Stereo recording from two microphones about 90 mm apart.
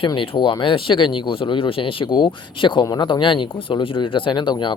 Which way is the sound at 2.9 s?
50° left (ahead or behind).